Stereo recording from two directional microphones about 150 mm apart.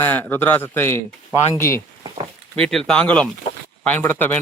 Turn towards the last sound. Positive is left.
turn(degrees=10)  # may be behind; listen again after turning